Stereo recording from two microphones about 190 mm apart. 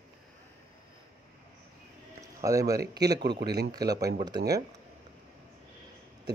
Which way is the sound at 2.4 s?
15° right (ahead or behind).